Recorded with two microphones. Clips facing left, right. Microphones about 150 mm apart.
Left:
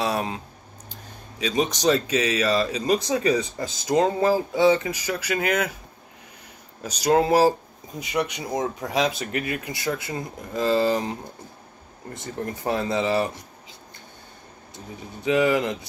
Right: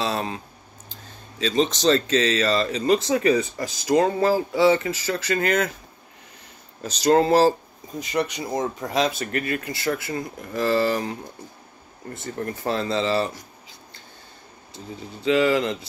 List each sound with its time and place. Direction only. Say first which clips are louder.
0.0 s a sound: left 1 dB; 15° left (ahead or behind)
1.4 s speech: right 2 dB; 10° left (ahead or behind)
6.8 s speech: right 2 dB; 10° left (ahead or behind)
8.7 s speech: right 1 dB; 10° left (ahead or behind)
12.1 s speech: right 1 dB; 15° left (ahead or behind)
14.7 s speech: right 2 dB; 20° left (ahead or behind)